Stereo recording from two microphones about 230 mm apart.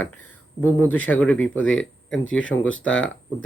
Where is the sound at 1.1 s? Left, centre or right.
Centre.